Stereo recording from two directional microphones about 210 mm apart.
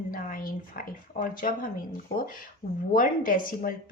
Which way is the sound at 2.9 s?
40° left (ahead or behind).